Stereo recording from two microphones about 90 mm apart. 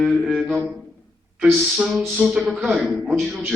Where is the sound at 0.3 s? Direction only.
5° right (ahead or behind).